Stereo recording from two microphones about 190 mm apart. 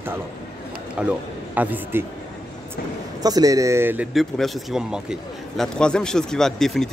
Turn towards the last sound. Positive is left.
turn(degrees=0)  # may be behind; listen again after turning